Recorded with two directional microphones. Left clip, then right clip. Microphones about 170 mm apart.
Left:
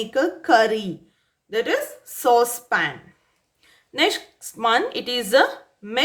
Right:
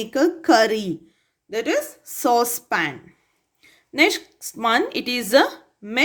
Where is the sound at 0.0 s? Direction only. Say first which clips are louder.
Right 2 dB; 35° right (ahead or behind).